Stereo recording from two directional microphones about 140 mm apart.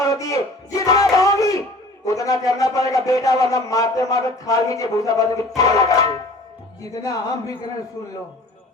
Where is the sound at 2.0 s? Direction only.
25° left (ahead or behind).